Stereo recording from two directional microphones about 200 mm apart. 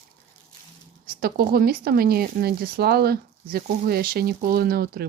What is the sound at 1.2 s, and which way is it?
Speech, 50° right (ahead or behind).